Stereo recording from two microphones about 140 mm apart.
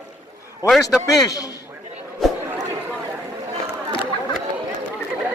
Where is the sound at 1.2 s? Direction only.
25° left (ahead or behind).